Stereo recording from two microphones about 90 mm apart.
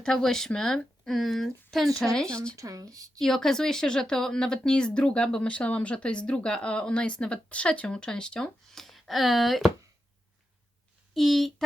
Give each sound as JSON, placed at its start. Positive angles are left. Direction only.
{"t": 0.0, "sound": "speech", "side_deg": 5}
{"t": 2.6, "sound": "speech", "side_deg": -40}
{"t": 3.2, "sound": "speech", "side_deg": 5}
{"t": 11.1, "sound": "speech", "side_deg": 0}